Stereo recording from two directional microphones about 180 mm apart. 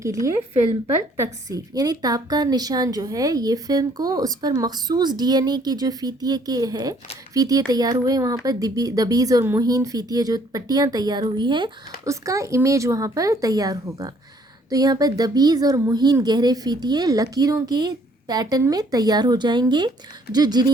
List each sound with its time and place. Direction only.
0.0 s a woman's voice: 15° right (ahead or behind)